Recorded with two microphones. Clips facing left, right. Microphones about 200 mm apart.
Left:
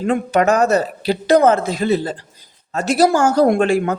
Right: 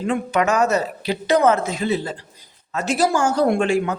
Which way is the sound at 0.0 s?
40° left (ahead or behind).